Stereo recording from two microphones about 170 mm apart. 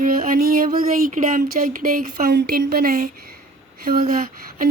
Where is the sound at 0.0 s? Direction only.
55° right (ahead or behind).